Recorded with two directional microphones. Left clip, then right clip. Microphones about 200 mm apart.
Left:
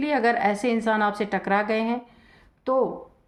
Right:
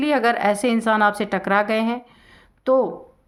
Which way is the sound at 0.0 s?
35° right (ahead or behind).